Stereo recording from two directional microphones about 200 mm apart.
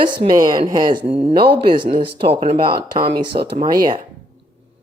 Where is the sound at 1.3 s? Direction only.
50° right (ahead or behind).